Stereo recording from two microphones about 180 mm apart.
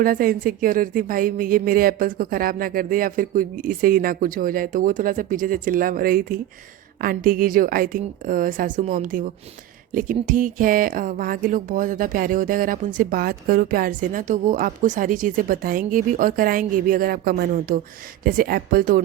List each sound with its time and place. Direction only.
0.0 s speech: 50° right (ahead or behind)